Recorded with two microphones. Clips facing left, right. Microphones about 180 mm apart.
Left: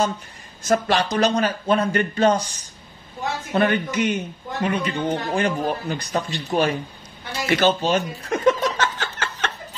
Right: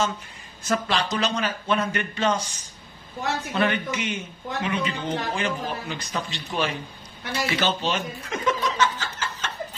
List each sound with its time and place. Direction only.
0.7 s speech: 45° left (ahead or behind)
3.5 s speech: 50° left (ahead or behind)
7.4 s chuckle: 45° left (ahead or behind); by 9.5 s 65° left (ahead or behind)